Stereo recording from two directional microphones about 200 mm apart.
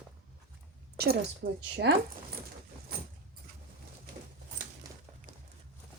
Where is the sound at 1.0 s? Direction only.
50° right (ahead or behind).